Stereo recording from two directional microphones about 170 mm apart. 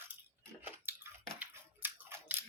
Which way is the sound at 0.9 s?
10° right (ahead or behind).